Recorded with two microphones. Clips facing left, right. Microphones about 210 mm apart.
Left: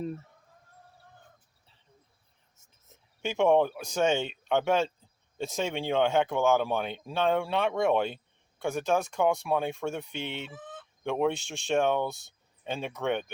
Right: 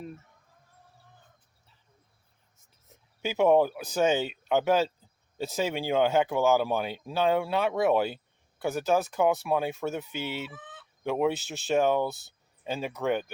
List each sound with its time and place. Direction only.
3.2 s speech: 5° right (ahead or behind)
10.5 s fowl: 45° left (ahead or behind)
11.0 s speech: 5° right (ahead or behind)